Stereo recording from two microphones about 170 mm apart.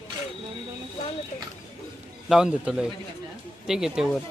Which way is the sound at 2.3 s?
5° right (ahead or behind).